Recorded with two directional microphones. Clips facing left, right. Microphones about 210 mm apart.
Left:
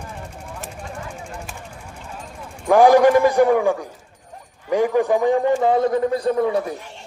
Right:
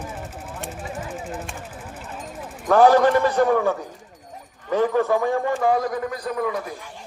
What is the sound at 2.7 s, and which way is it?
A man's voice, 15° left (ahead or behind).